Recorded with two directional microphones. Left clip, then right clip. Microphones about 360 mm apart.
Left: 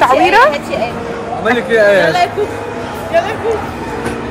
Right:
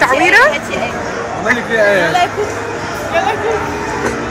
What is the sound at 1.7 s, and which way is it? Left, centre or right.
Speech, left.